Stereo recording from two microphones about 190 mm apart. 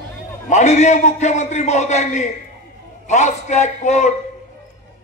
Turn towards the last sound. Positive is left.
turn(degrees=35)  # may be behind; listen again after turning